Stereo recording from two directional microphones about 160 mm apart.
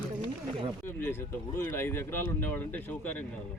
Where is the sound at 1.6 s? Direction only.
15° left (ahead or behind).